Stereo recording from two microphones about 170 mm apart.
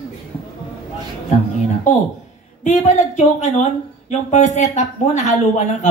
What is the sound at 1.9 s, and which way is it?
Speech, 45° left (ahead or behind).